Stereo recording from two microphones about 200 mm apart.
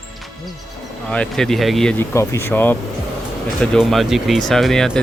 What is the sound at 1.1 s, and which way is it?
Speech, 5° left (ahead or behind).